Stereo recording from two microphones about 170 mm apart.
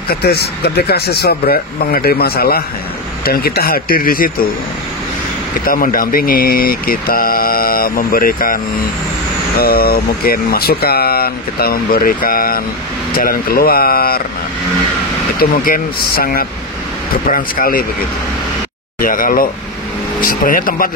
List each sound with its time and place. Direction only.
0.1 s speech: 70° left (ahead or behind)
5.7 s speech: 55° left (ahead or behind)
9.6 s speech: 65° left (ahead or behind)
15.3 s speech: 60° left (ahead or behind)
18.9 s speech: 55° left (ahead or behind)